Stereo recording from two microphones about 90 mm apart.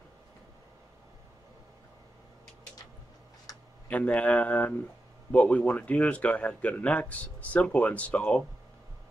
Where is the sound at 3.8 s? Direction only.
15° left (ahead or behind).